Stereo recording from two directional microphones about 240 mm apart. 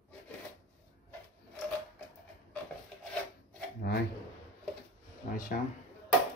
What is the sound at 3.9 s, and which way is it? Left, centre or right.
Speech, left.